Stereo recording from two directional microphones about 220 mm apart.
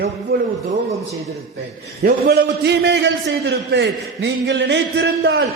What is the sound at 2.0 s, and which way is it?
A man's voice, 50° right (ahead or behind).